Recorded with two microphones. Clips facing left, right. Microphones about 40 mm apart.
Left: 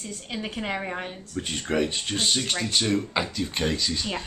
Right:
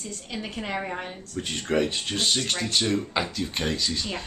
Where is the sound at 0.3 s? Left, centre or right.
Centre.